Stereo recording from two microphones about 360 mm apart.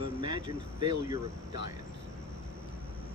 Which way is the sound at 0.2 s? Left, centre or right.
Centre.